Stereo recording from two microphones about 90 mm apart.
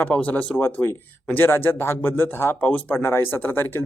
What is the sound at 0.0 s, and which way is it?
Speech, 15° left (ahead or behind).